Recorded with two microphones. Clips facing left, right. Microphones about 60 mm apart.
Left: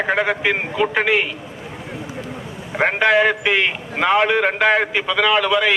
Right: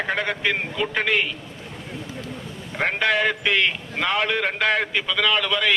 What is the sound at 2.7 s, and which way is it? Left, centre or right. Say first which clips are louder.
A man's voice: left 6 dB; centre.